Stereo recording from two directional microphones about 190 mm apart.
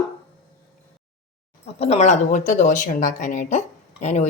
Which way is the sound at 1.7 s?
35° left (ahead or behind).